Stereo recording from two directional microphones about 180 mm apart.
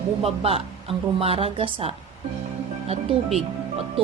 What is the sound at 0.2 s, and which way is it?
Speech, 35° right (ahead or behind).